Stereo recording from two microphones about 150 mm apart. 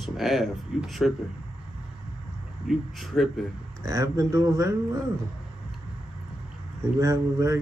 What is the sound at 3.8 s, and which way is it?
Speech, 20° right (ahead or behind).